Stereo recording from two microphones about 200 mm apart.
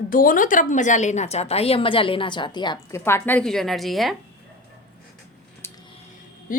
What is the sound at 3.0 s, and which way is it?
A woman's voice, 10° left (ahead or behind).